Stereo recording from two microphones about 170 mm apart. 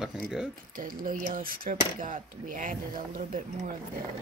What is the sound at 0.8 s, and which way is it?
Speech, 55° right (ahead or behind).